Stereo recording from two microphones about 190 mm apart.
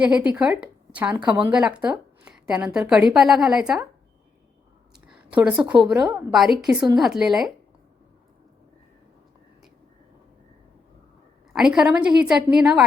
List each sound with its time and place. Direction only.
0.0 s a woman's voice: 5° right (ahead or behind)
5.1 s a woman's voice: 5° right (ahead or behind)
11.5 s a woman's voice: 5° right (ahead or behind)